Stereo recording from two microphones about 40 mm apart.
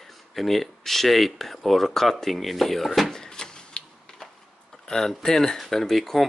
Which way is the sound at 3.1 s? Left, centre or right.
Centre.